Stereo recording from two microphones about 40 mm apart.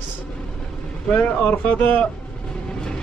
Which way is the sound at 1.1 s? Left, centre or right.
Left.